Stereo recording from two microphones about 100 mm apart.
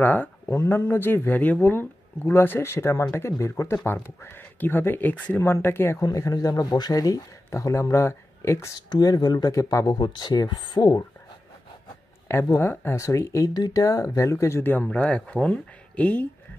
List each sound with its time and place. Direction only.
0.0 s speech: 15° left (ahead or behind)
6.0 s speech: 35° left (ahead or behind)
8.9 s speech: 40° left (ahead or behind)
9.9 s speech: 50° left (ahead or behind)
12.3 s speech: 25° left (ahead or behind)